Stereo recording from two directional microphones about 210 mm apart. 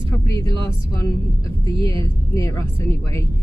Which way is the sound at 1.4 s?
25° right (ahead or behind).